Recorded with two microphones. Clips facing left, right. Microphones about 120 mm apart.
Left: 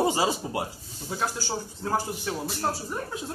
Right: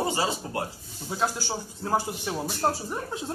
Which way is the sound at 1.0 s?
15° right (ahead or behind).